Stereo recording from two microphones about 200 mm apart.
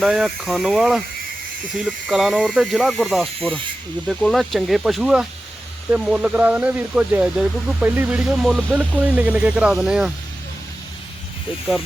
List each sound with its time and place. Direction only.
0.0 s speech: centre (ahead or behind)